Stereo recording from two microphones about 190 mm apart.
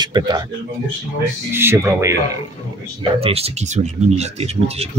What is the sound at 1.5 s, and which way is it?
Speech, 10° right (ahead or behind).